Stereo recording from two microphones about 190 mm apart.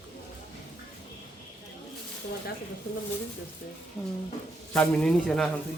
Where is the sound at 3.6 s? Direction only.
55° left (ahead or behind).